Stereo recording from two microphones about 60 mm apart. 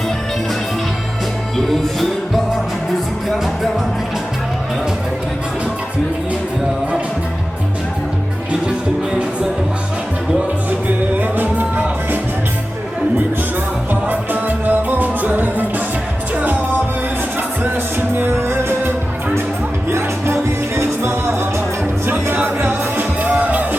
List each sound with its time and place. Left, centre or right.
1.5 s music: centre
10.8 s music: right
14.1 s music: right
18.2 s music: right
22.0 s music: right